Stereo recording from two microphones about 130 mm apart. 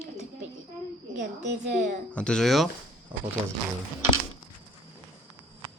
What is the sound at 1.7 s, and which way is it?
Speech, 70° right (ahead or behind).